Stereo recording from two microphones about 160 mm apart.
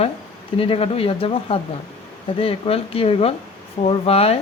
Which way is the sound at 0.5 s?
35° left (ahead or behind).